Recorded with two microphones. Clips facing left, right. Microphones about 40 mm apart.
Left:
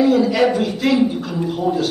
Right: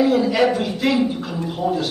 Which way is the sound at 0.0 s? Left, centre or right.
Centre.